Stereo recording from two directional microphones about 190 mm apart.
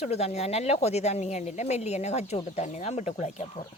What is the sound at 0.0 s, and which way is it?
Speech, 35° left (ahead or behind).